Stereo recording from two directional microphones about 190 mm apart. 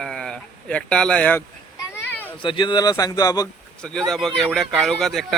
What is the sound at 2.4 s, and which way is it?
Speech, 25° left (ahead or behind).